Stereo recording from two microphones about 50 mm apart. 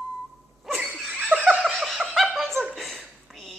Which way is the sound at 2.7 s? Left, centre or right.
Centre.